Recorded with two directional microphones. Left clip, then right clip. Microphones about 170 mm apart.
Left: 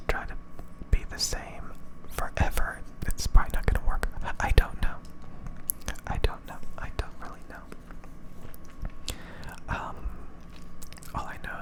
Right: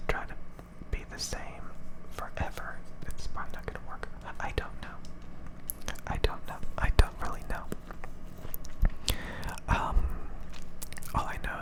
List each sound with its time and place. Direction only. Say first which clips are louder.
0.1 s whispering: left 2 dB; centre (ahead or behind)
2.1 s whispering: left 6 dB; 15° left (ahead or behind)
5.8 s whispering: even; centre (ahead or behind)
6.7 s whispering: right 8 dB; 20° right (ahead or behind)
8.8 s whispering: right 5 dB; 15° right (ahead or behind)
11.1 s whispering: right 2 dB; 10° right (ahead or behind)